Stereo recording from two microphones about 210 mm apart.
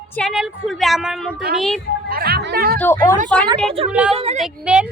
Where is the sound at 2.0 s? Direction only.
45° right (ahead or behind).